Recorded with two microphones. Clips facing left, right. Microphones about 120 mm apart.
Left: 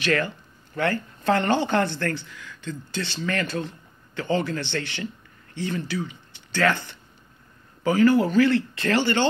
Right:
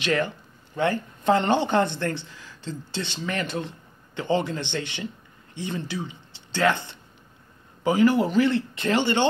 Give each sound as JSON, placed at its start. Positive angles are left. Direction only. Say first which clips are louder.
{"t": 0.0, "sound": "speech", "louder": "even", "side_deg": -20}